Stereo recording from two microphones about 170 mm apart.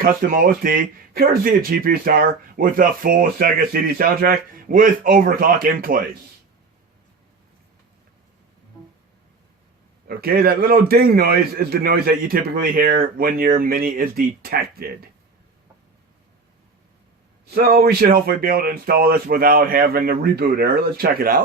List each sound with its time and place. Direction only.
0.0 s speech: 60° right (ahead or behind)
10.1 s speech: 60° right (ahead or behind)
17.4 s speech: 65° right (ahead or behind)